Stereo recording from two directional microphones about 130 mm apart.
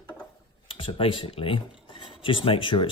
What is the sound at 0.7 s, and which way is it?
Speech, 45° left (ahead or behind).